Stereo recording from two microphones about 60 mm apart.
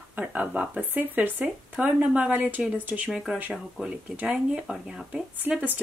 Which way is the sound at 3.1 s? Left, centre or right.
Right.